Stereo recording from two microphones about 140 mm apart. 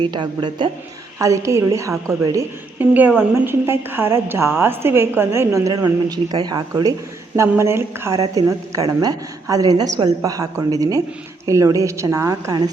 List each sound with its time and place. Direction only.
0.0 s speech: 30° right (ahead or behind)
1.2 s a woman's voice: 20° right (ahead or behind)
2.9 s a woman's voice: 10° right (ahead or behind); by 6.9 s 30° right (ahead or behind)
7.3 s a woman's voice: 15° right (ahead or behind)